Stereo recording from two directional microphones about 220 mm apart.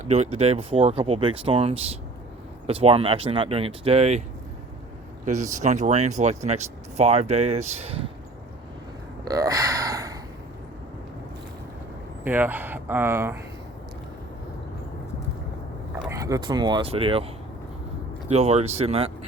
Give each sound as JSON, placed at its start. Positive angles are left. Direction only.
{"t": 0.0, "sound": "speech", "side_deg": -30}
{"t": 5.2, "sound": "speech", "side_deg": -35}
{"t": 9.2, "sound": "speech", "side_deg": -15}
{"t": 12.2, "sound": "speech", "side_deg": -10}
{"t": 16.0, "sound": "speech", "side_deg": -15}
{"t": 18.3, "sound": "speech", "side_deg": -30}